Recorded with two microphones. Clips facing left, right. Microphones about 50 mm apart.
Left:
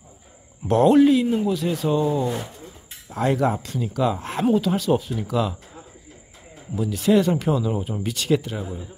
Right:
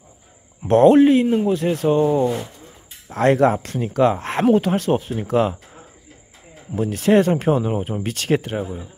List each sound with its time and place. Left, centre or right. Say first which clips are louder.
0.7 s speech: right 3 dB; right
3.1 s speech: right 6 dB; right
6.7 s speech: right 3 dB; right